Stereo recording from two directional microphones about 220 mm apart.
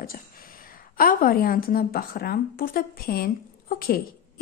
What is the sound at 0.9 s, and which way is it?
A woman's voice, 40° left (ahead or behind).